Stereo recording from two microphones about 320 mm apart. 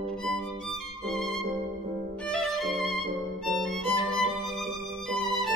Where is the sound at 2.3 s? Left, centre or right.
Centre.